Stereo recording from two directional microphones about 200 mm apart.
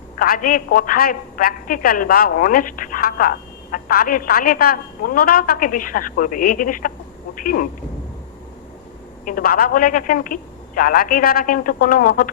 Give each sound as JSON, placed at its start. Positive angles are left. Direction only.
{"t": 0.2, "sound": "a woman's voice", "side_deg": 45}
{"t": 9.2, "sound": "a woman's voice", "side_deg": 45}